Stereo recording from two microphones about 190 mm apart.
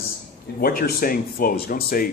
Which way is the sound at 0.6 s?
50° left (ahead or behind).